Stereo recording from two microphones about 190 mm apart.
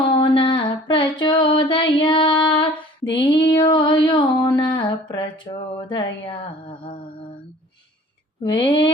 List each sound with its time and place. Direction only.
0.2 s a sound: 25° left (ahead or behind)
3.2 s music: 25° left (ahead or behind)
8.4 s music: 25° left (ahead or behind)